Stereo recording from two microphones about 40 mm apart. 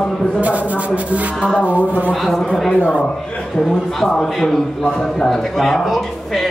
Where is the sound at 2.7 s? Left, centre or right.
Left.